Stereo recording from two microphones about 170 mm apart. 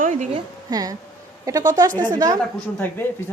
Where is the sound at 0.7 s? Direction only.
20° right (ahead or behind).